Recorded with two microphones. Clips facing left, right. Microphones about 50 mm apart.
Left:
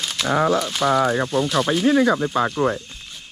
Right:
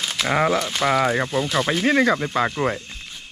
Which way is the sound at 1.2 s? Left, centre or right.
Centre.